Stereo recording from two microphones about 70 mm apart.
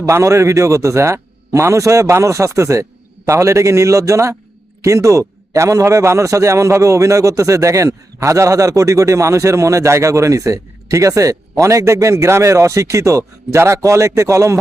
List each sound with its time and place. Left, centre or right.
0.0 s a man's voice: right